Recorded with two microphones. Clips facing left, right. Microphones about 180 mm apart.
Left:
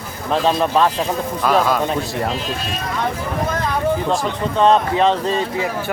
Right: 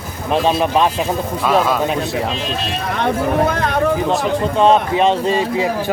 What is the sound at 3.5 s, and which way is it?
Speech, 75° right (ahead or behind).